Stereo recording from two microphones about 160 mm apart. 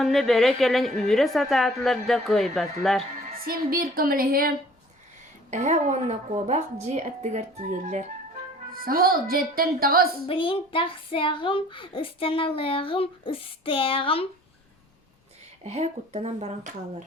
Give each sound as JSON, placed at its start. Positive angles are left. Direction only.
{"t": 0.0, "sound": "a woman's voice", "side_deg": 0}
{"t": 3.3, "sound": "a woman's voice", "side_deg": -65}
{"t": 5.5, "sound": "a woman's voice", "side_deg": -50}
{"t": 8.7, "sound": "speech", "side_deg": -65}
{"t": 10.2, "sound": "speech", "side_deg": 35}
{"t": 15.6, "sound": "a woman's voice", "side_deg": -45}